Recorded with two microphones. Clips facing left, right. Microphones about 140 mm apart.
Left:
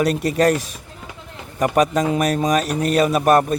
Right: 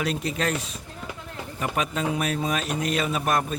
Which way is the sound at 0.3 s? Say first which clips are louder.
Left 14 dB; 45° left (ahead or behind).